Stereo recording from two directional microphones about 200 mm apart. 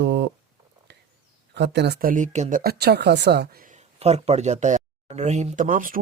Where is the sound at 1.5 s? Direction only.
60° right (ahead or behind).